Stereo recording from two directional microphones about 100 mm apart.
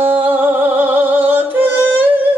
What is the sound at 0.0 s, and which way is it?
Music, 20° right (ahead or behind).